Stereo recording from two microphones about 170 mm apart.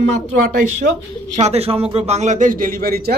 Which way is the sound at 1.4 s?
35° right (ahead or behind).